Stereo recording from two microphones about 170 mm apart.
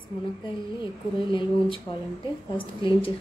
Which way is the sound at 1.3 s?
30° left (ahead or behind).